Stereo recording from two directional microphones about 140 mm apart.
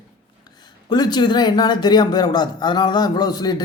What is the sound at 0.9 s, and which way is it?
A man's voice, 30° left (ahead or behind).